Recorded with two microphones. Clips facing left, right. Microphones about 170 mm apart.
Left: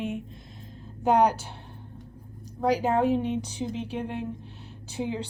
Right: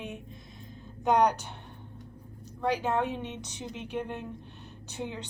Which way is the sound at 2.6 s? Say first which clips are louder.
Left 5 dB; 35° left (ahead or behind).